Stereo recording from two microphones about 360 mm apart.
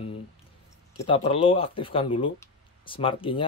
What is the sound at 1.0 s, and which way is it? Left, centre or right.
Speech, centre.